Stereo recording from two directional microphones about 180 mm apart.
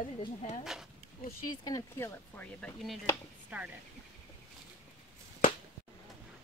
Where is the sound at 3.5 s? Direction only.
10° right (ahead or behind).